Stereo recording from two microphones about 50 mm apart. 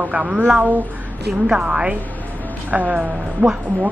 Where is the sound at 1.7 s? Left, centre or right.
Right.